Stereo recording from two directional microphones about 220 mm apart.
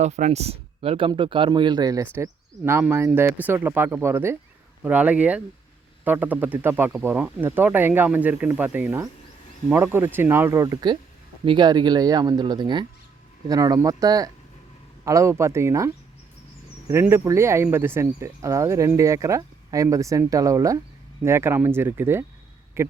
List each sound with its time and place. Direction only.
0.0 s speech: 30° right (ahead or behind)
2.1 s cricket: 10° right (ahead or behind)
11.4 s speech: 20° right (ahead or behind)
13.5 s cricket: 15° right (ahead or behind)
16.9 s cricket: 10° right (ahead or behind)
22.8 s speech: 10° right (ahead or behind)